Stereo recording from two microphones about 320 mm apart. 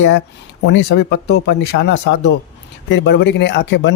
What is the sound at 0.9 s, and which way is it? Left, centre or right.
A man's voice, left.